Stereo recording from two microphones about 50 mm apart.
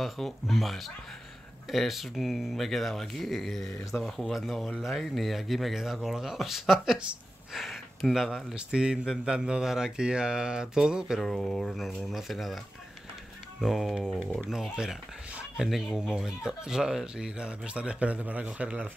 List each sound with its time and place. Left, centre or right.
0.0 s speech: centre
8.5 s speech: centre
11.1 s speech: centre
13.6 s speech: centre; by 18.9 s right